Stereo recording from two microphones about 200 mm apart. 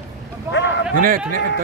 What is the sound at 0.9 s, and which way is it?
Speech, 45° right (ahead or behind).